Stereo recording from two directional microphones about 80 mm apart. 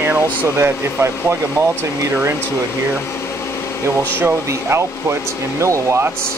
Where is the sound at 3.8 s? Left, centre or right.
Right.